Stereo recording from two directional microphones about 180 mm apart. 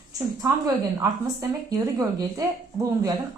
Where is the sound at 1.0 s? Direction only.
20° right (ahead or behind).